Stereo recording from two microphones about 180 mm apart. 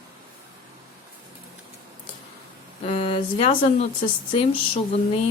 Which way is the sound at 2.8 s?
35° left (ahead or behind).